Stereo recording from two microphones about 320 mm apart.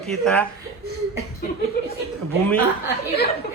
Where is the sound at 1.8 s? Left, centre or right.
Left.